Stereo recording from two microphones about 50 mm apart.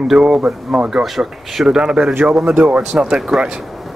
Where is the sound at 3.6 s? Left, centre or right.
Centre.